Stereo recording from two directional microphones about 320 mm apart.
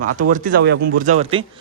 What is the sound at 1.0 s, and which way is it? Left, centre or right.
Speech, right.